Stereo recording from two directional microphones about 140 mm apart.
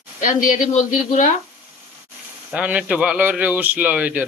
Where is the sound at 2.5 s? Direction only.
10° right (ahead or behind).